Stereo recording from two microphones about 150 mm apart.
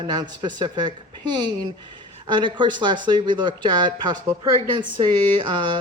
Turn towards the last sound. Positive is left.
turn(degrees=-30)  # may be behind; listen again after turning